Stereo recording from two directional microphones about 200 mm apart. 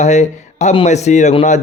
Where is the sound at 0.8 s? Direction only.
35° left (ahead or behind).